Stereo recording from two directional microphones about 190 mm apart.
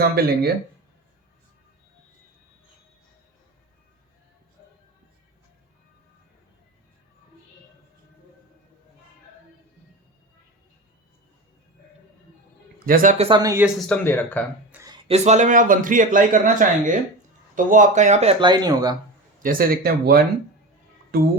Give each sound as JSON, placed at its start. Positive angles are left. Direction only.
{"t": 0.0, "sound": "speech", "side_deg": -55}
{"t": 12.8, "sound": "speech", "side_deg": -45}
{"t": 13.2, "sound": "speech", "side_deg": -20}
{"t": 13.7, "sound": "speech", "side_deg": 5}
{"t": 14.7, "sound": "a sound", "side_deg": -15}
{"t": 15.0, "sound": "speech", "side_deg": -35}
{"t": 19.4, "sound": "speech", "side_deg": -50}